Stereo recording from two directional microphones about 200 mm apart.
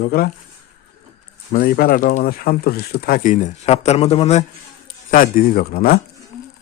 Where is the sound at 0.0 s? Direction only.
50° left (ahead or behind).